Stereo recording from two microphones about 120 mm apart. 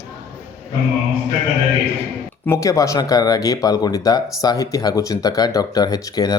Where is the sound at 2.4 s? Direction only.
25° left (ahead or behind).